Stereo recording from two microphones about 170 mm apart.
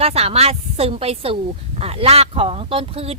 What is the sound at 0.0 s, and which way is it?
Speech, 35° right (ahead or behind).